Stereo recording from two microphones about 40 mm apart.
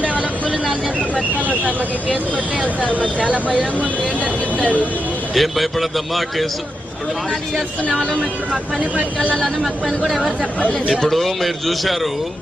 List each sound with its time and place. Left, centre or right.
2.8 s speech: left
5.3 s a man's voice: centre
10.1 s a man's voice: centre